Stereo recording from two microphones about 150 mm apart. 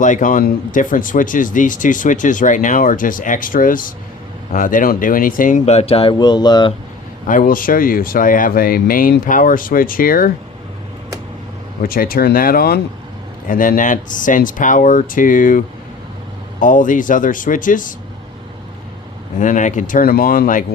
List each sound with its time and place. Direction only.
0.0 s speech: 60° left (ahead or behind); by 6.7 s 30° left (ahead or behind)
7.3 s speech: 65° left (ahead or behind)
11.8 s speech: 80° left
13.5 s speech: 65° left (ahead or behind)
19.4 s speech: 60° left (ahead or behind)